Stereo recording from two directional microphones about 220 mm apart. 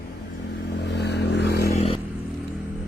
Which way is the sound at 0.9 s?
50° left (ahead or behind).